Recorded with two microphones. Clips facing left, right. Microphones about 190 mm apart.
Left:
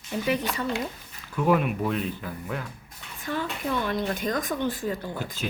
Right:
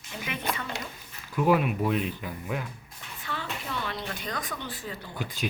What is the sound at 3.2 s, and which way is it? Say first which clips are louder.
Speech: left 7 dB; 45° left (ahead or behind).